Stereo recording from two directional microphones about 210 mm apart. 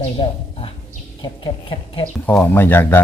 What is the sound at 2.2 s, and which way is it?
Speech, 10° left (ahead or behind).